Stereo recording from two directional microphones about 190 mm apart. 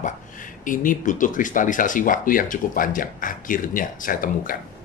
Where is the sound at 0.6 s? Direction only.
45° left (ahead or behind).